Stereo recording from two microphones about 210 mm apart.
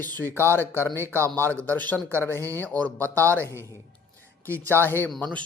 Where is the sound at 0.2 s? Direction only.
10° left (ahead or behind).